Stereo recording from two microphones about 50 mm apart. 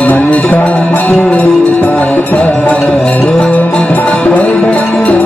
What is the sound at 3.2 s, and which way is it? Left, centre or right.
Music, centre.